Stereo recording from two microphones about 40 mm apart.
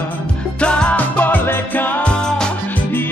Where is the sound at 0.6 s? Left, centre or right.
Left.